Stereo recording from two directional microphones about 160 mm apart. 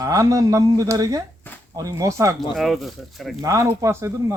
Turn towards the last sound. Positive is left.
turn(degrees=-20)  # may be behind; listen again after turning